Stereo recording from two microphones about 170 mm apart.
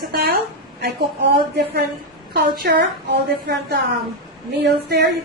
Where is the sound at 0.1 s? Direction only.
65° right (ahead or behind).